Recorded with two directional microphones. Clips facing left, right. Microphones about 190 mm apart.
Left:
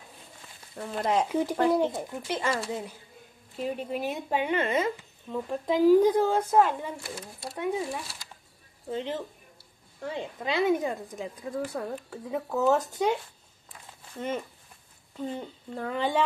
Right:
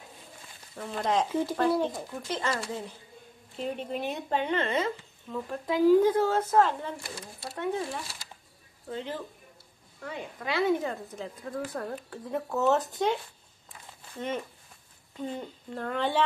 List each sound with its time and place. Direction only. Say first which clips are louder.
0.7 s speech: left 1 dB; 10° left (ahead or behind)
15.1 s a woman's voice: left 1 dB; centre (ahead or behind)